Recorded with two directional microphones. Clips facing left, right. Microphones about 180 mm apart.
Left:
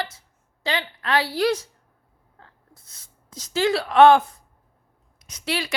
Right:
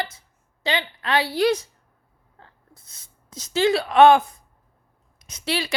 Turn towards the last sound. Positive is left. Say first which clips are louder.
# right 1 dB
turn(degrees=-30)  # may be behind; listen again after turning